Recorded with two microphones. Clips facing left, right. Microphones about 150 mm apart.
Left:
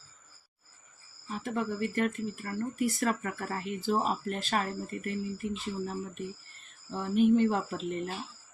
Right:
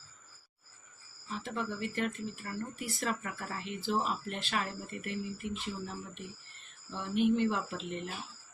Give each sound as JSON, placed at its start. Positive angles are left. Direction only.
{"t": 1.4, "sound": "speech", "side_deg": 45}